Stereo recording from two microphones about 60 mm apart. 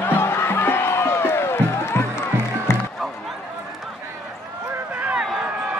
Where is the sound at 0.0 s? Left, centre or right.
Left.